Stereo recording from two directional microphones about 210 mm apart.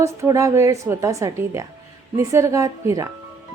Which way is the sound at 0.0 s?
15° right (ahead or behind).